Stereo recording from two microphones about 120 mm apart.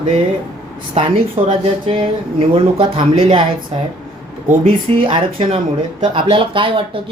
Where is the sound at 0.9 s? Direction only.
50° right (ahead or behind).